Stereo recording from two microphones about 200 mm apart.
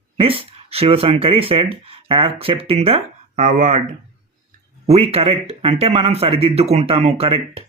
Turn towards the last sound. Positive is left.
turn(degrees=-30)  # may be behind; listen again after turning